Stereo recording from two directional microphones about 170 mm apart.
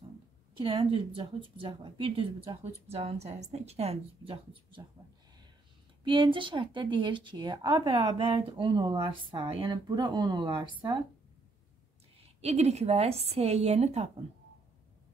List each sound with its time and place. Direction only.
0.7 s a woman's voice: 25° right (ahead or behind)
6.0 s speech: 30° right (ahead or behind)
12.4 s a woman's voice: 40° right (ahead or behind)